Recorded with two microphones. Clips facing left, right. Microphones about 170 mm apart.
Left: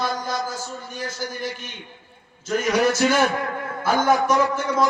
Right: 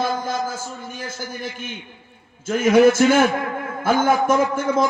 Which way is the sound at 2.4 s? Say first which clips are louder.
Right 6 dB; 50° right (ahead or behind).